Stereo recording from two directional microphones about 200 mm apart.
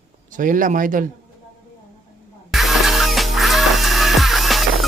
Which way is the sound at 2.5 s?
Centre (ahead or behind).